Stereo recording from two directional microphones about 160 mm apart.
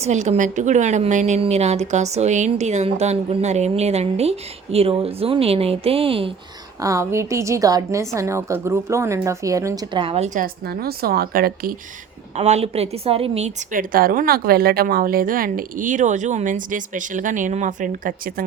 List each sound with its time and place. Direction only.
0.0 s a woman's voice: 45° right (ahead or behind)
6.8 s a woman's voice: 20° right (ahead or behind)
10.0 s a woman's voice: 35° right (ahead or behind)
10.2 s a woman's voice: 55° right (ahead or behind)
10.7 s speech: 70° right (ahead or behind)
12.4 s a woman's voice: 40° right (ahead or behind)
13.7 s a woman's voice: 60° right (ahead or behind)